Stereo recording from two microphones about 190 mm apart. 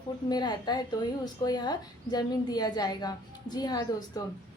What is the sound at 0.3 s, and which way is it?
Speech, 20° left (ahead or behind).